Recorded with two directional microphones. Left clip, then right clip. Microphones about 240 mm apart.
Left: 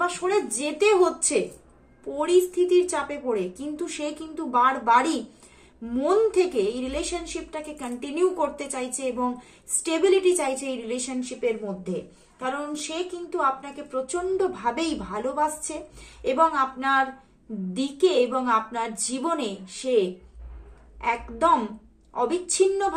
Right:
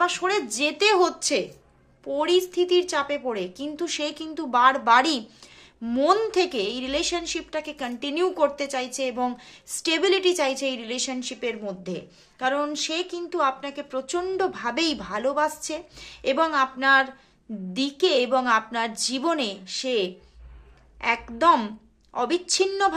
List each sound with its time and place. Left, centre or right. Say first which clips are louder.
0.0 s a woman's voice: right 1 dB; right